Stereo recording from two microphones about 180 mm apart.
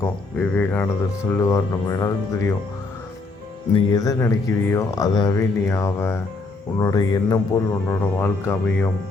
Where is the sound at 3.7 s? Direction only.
20° left (ahead or behind).